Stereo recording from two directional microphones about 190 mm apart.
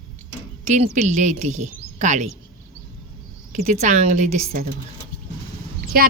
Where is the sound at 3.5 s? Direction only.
40° right (ahead or behind).